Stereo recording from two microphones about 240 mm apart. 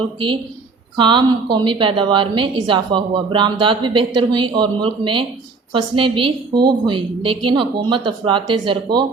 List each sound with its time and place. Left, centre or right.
0.9 s a woman's voice: centre